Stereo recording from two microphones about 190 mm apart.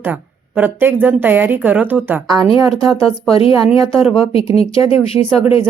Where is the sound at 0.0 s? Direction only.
10° right (ahead or behind).